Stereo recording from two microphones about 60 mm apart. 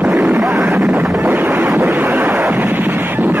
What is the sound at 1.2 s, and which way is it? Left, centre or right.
Wind noise, right.